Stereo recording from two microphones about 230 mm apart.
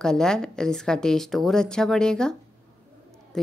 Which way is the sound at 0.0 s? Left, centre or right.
Centre.